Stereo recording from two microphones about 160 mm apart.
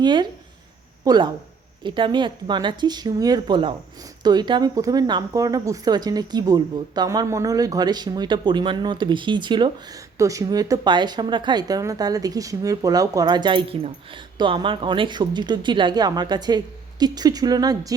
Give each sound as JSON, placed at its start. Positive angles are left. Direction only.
{"t": 0.0, "sound": "speech", "side_deg": -30}